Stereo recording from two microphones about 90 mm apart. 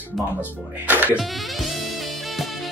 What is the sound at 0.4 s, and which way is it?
Speech, 20° right (ahead or behind).